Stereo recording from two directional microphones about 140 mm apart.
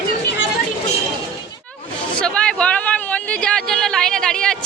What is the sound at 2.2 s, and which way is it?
Speech, 5° left (ahead or behind).